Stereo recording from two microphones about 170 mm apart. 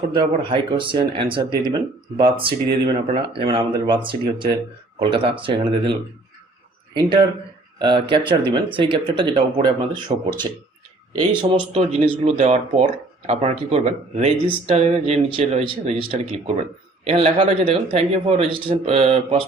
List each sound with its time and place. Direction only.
0.1 s speech: 25° right (ahead or behind)